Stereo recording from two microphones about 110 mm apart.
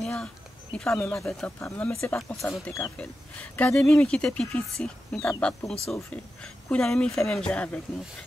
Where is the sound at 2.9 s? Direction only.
10° left (ahead or behind).